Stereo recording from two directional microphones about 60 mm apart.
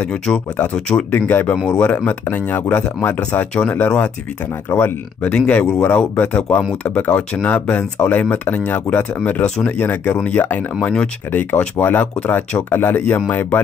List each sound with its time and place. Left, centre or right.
0.1 s speech: centre
1.3 s speech: left
4.6 s speech: left
5.2 s speech: left
11.7 s speech: left